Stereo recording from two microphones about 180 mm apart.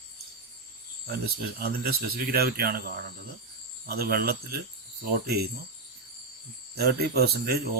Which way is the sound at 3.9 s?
55° right (ahead or behind).